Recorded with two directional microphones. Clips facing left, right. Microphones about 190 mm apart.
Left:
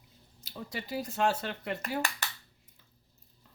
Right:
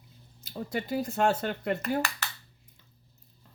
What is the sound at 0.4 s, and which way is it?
Speech, 50° right (ahead or behind).